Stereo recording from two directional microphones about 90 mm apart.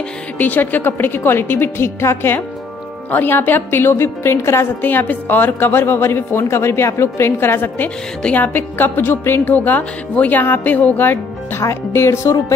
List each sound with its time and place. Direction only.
0.4 s a woman's voice: 20° left (ahead or behind)